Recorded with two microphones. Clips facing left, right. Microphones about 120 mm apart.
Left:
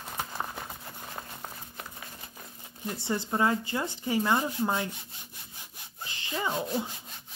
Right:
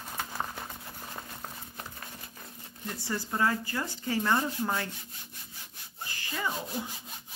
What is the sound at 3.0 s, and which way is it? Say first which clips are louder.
Speech: left 2 dB; 20° left (ahead or behind).